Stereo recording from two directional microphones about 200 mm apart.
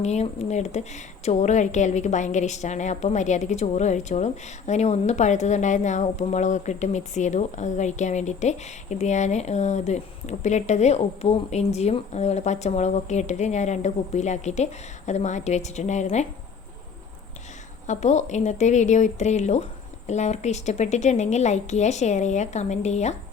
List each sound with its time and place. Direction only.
0.0 s a woman's voice: 35° left (ahead or behind)
17.8 s a woman's voice: 35° left (ahead or behind)